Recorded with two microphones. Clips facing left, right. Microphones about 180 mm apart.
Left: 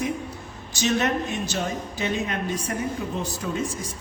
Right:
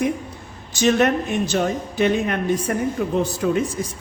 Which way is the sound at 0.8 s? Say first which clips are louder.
Right 6 dB; 55° right (ahead or behind).